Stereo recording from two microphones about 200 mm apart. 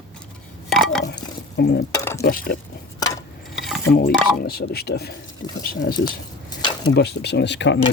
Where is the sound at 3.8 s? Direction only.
50° left (ahead or behind).